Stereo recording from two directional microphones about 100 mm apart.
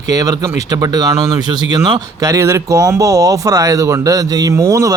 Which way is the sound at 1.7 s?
50° right (ahead or behind).